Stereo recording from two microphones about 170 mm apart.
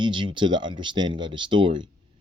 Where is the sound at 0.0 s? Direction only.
30° right (ahead or behind).